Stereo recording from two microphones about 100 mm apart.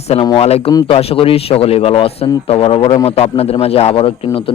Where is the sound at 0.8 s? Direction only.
70° left (ahead or behind).